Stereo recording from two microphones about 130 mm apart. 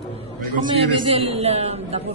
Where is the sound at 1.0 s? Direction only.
45° right (ahead or behind).